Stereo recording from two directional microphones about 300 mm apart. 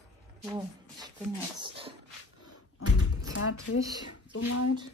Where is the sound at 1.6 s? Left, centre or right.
Centre.